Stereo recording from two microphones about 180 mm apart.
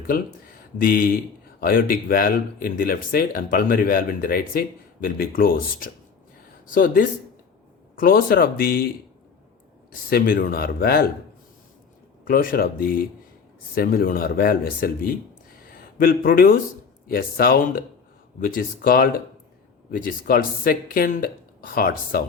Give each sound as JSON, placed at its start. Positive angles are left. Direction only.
{"t": 0.1, "sound": "speech", "side_deg": 55}
{"t": 10.1, "sound": "speech", "side_deg": 55}
{"t": 12.3, "sound": "speech", "side_deg": 55}
{"t": 15.5, "sound": "a sound", "side_deg": 55}
{"t": 17.1, "sound": "speech", "side_deg": 55}